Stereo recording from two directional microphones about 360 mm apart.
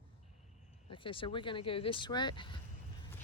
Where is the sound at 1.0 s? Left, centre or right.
Centre.